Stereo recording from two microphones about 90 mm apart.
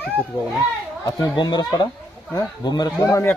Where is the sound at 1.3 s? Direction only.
55° left (ahead or behind).